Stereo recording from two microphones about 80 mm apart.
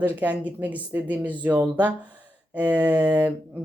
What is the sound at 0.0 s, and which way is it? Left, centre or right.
Speech, centre.